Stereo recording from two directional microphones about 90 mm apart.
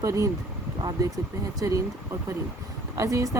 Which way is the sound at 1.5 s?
40° right (ahead or behind).